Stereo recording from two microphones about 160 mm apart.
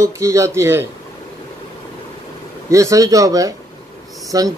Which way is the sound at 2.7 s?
20° right (ahead or behind).